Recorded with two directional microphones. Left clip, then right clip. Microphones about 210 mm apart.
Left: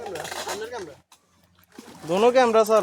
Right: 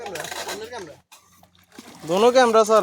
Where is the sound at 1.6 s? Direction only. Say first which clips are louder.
Right 2 dB; 25° right (ahead or behind).